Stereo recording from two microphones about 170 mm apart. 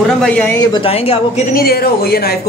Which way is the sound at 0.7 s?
35° left (ahead or behind).